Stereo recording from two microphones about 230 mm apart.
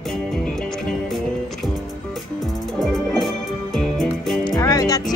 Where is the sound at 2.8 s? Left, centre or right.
Centre.